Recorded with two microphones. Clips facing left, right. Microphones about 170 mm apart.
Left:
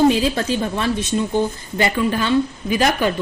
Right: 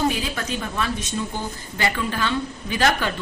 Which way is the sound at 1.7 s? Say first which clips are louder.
Left 6 dB; 20° left (ahead or behind).